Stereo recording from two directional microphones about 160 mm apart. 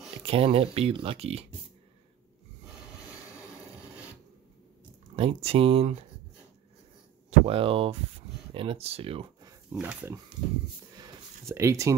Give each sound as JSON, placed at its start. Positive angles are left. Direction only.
{"t": 0.2, "sound": "speech", "side_deg": -35}
{"t": 5.1, "sound": "speech", "side_deg": -40}
{"t": 7.2, "sound": "speech", "side_deg": -35}
{"t": 9.7, "sound": "speech", "side_deg": -10}
{"t": 11.0, "sound": "a sound", "side_deg": -20}